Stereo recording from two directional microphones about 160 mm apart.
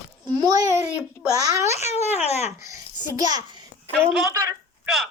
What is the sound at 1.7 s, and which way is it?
Speech, 45° left (ahead or behind).